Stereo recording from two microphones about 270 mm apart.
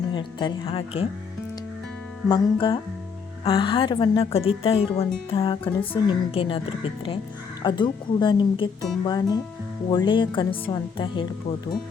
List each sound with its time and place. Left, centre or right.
0.1 s a woman's voice: centre
2.3 s a woman's voice: centre